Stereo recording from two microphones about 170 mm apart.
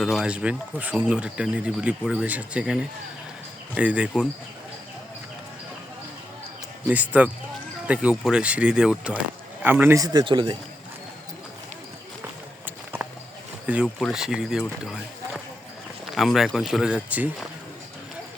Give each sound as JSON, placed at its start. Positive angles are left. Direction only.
{"t": 0.0, "sound": "speech", "side_deg": 0}
{"t": 6.8, "sound": "a man's voice", "side_deg": -10}
{"t": 12.6, "sound": "clip-clop", "side_deg": -10}
{"t": 13.7, "sound": "speech", "side_deg": -10}
{"t": 16.0, "sound": "speech", "side_deg": 0}